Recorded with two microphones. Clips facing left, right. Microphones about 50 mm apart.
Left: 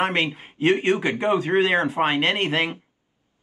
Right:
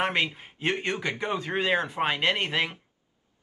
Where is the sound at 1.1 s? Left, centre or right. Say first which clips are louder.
Left 9 dB; left.